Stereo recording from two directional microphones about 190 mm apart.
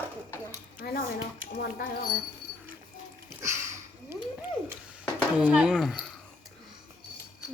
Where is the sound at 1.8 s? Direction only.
50° left (ahead or behind).